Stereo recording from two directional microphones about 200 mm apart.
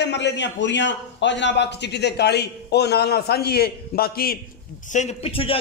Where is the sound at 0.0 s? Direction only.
60° left (ahead or behind).